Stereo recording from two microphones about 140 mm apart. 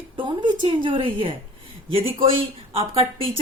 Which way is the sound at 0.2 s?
35° right (ahead or behind).